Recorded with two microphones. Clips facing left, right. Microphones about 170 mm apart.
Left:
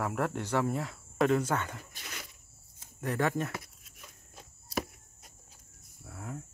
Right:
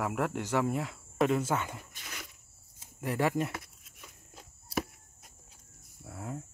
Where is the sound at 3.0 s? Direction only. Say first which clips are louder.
Right 1 dB; 10° right (ahead or behind).